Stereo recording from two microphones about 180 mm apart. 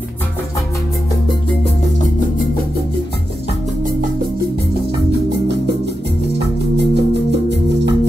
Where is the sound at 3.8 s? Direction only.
50° right (ahead or behind).